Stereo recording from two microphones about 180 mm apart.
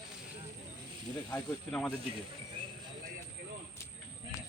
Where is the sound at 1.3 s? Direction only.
5° left (ahead or behind).